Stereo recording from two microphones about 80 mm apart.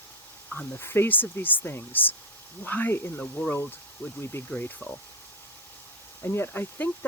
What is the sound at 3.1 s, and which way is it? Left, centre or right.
Speech, centre.